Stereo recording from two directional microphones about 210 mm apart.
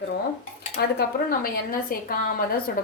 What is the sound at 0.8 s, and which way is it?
A woman's voice, 50° left (ahead or behind).